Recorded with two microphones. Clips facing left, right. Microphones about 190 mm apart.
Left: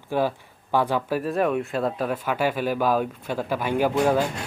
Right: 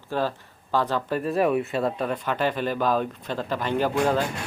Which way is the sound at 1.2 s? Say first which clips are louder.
Right 1 dB; centre (ahead or behind).